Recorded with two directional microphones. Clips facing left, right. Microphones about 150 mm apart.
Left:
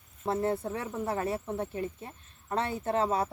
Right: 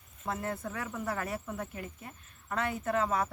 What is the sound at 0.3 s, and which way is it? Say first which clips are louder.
Speech: left 6 dB; 30° left (ahead or behind).